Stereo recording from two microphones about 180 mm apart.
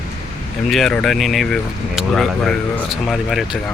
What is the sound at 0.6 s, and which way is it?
Speech, centre (ahead or behind).